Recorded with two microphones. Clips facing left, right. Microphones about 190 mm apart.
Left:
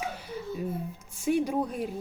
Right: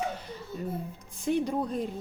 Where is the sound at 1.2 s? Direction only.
10° left (ahead or behind).